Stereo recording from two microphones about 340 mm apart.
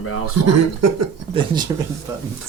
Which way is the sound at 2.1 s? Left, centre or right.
Centre.